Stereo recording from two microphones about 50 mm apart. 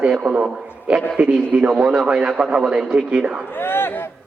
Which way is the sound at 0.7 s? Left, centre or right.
Right.